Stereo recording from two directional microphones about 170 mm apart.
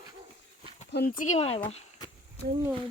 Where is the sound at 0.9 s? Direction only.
70° left (ahead or behind).